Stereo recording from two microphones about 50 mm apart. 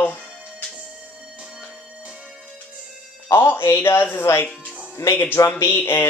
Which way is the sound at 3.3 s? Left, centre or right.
Left.